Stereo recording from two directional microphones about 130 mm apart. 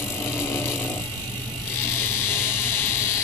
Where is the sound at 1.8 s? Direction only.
20° left (ahead or behind).